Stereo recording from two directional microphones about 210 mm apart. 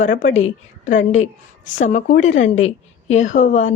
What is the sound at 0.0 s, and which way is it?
A woman's voice, 35° left (ahead or behind).